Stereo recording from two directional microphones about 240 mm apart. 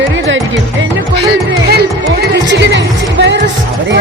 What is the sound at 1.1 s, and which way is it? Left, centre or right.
Music, right.